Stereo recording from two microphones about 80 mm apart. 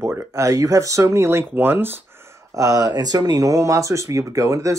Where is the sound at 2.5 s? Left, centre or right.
Right.